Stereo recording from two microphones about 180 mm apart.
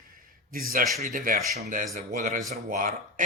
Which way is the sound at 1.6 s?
50° right (ahead or behind).